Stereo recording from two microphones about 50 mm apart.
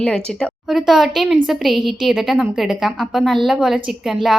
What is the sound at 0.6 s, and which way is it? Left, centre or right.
A woman's voice, centre.